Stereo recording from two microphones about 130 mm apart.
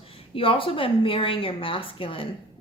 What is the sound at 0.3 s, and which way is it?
A woman's voice, 45° left (ahead or behind).